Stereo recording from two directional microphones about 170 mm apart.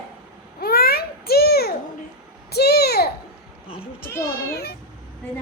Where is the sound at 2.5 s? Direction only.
70° left (ahead or behind).